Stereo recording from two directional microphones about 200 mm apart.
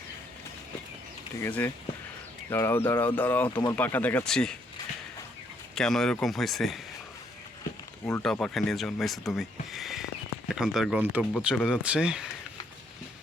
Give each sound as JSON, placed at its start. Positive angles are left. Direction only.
{"t": 1.4, "sound": "speech", "side_deg": 10}
{"t": 3.5, "sound": "speech", "side_deg": 20}
{"t": 3.8, "sound": "speech", "side_deg": 10}
{"t": 5.7, "sound": "speech", "side_deg": 0}
{"t": 8.2, "sound": "speech", "side_deg": 5}